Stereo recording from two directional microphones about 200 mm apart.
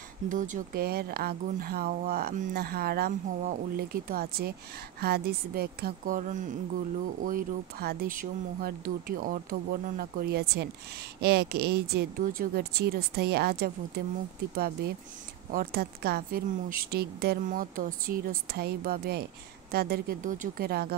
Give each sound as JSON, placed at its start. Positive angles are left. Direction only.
{"t": 0.3, "sound": "speech", "side_deg": -40}